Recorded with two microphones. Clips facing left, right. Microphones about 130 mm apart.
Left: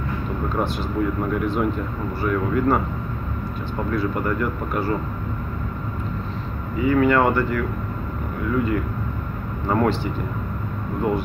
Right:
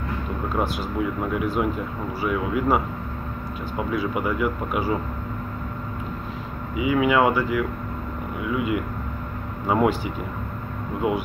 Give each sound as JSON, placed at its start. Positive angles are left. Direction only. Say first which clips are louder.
{"t": 0.6, "sound": "speech", "louder": "left 1 dB", "side_deg": -5}
{"t": 6.8, "sound": "speech", "louder": "left 2 dB", "side_deg": -10}